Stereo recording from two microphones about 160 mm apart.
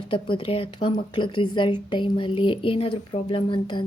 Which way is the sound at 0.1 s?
30° left (ahead or behind).